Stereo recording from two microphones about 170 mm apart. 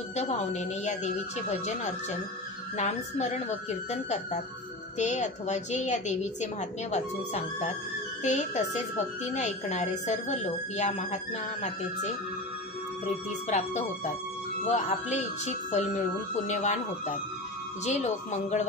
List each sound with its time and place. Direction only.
0.1 s a woman's voice: 40° left (ahead or behind)
13.0 s a woman's voice: 40° left (ahead or behind)